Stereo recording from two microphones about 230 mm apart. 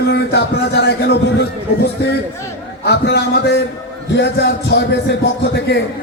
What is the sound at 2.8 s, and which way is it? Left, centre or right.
A man's voice, left.